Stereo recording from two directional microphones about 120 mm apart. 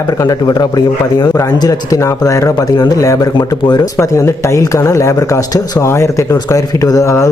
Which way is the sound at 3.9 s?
25° left (ahead or behind).